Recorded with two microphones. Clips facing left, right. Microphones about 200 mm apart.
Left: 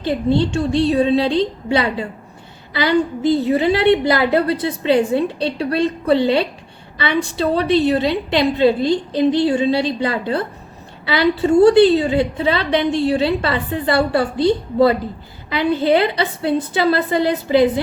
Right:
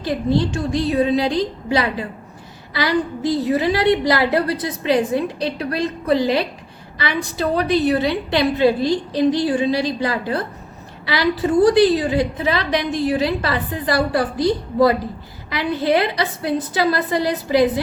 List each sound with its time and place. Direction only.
0.0 s a woman's voice: 25° left (ahead or behind)